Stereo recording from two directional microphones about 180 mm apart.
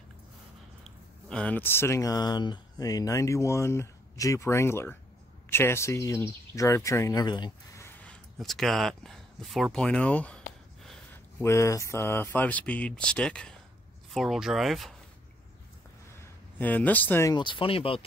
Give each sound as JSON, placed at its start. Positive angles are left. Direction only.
{"t": 0.8, "sound": "speech", "side_deg": 5}
{"t": 11.4, "sound": "speech", "side_deg": 15}
{"t": 16.5, "sound": "speech", "side_deg": 10}